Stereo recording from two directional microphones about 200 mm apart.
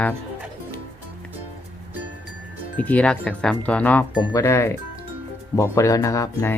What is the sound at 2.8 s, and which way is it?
Speech, 5° left (ahead or behind).